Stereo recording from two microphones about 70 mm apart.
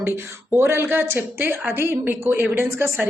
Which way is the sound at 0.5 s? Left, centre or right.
Right.